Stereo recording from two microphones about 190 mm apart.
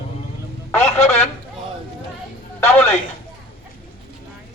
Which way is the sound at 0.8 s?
35° left (ahead or behind).